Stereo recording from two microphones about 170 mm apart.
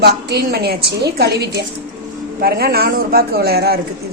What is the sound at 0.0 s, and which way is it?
A woman's voice, 70° right (ahead or behind).